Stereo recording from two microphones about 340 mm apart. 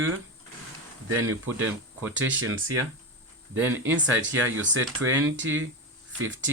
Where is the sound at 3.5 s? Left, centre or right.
Centre.